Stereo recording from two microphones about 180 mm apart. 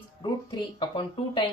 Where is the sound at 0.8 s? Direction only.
25° left (ahead or behind).